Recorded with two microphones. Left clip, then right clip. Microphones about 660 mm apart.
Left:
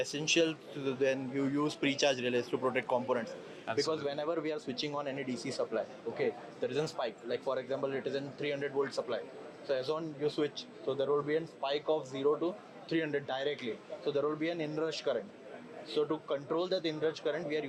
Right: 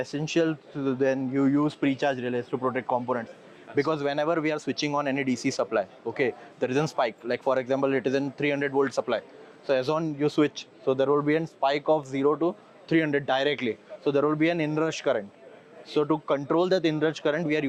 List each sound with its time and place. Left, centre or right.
0.0 s speech: right
3.8 s speech: right